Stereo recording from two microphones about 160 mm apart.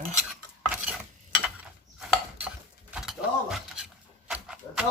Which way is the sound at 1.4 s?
5° right (ahead or behind).